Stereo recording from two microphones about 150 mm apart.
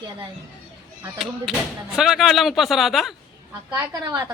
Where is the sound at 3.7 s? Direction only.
20° right (ahead or behind).